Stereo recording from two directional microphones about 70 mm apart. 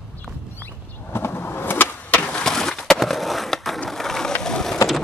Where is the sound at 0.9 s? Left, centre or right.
Left; by 3.8 s centre.